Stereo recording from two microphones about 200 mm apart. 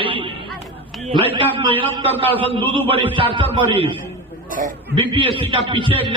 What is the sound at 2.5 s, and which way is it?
A man's voice, 25° right (ahead or behind).